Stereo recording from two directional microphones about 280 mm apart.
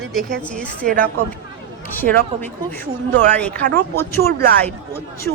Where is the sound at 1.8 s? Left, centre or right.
Centre.